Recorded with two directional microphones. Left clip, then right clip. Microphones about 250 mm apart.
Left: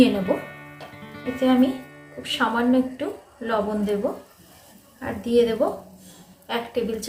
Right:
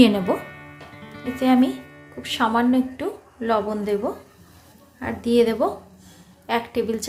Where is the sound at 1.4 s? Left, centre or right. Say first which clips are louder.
Right 1 dB; right.